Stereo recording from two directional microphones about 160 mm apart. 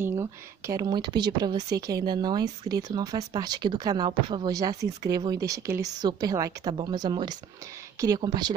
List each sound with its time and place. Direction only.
0.0 s speech: 20° right (ahead or behind)